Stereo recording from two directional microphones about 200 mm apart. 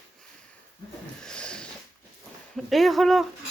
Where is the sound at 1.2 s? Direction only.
5° left (ahead or behind).